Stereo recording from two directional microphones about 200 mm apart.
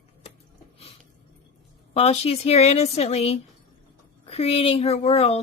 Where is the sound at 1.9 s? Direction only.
30° left (ahead or behind).